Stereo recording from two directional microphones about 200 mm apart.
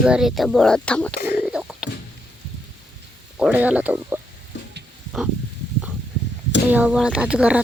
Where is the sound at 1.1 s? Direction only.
55° left (ahead or behind).